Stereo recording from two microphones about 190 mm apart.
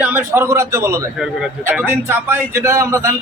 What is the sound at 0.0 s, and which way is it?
Speech, 10° right (ahead or behind).